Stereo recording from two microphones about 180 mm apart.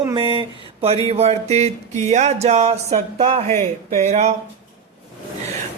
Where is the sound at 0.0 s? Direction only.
25° right (ahead or behind).